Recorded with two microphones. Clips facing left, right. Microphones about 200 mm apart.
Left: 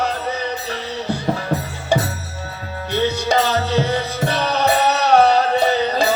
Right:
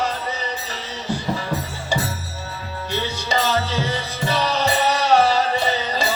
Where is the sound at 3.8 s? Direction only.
60° left (ahead or behind).